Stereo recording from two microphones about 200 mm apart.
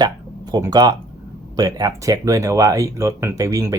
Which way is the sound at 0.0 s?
20° right (ahead or behind).